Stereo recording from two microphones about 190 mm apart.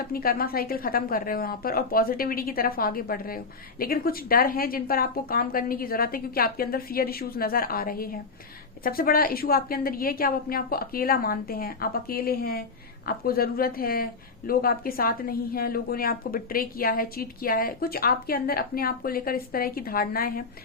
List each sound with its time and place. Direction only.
0.1 s a woman's voice: 50° left (ahead or behind)